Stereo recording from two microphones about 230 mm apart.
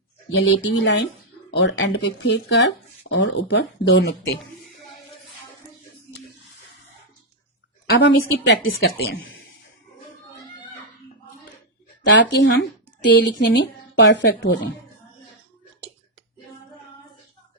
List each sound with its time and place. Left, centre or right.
0.3 s speech: left
7.9 s speech: left
12.0 s speech: left